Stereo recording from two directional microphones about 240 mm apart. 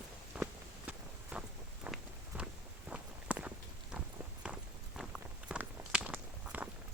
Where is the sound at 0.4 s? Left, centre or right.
Centre.